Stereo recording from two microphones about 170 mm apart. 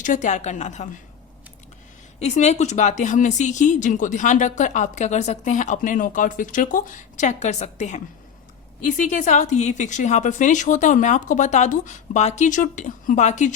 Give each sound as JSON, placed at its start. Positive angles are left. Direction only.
{"t": 0.0, "sound": "a woman's voice", "side_deg": 45}
{"t": 2.1, "sound": "a woman's voice", "side_deg": 40}